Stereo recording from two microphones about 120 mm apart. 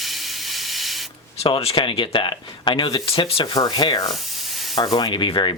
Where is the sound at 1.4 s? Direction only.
55° left (ahead or behind); by 4.1 s 35° left (ahead or behind).